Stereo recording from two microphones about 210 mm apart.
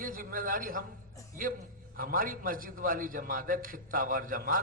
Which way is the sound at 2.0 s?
40° right (ahead or behind).